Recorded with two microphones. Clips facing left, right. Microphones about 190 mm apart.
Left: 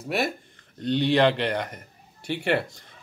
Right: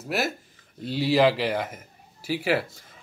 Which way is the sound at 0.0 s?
Centre (ahead or behind).